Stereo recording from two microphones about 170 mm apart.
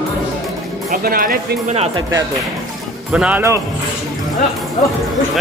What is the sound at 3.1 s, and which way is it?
Speech, 10° right (ahead or behind).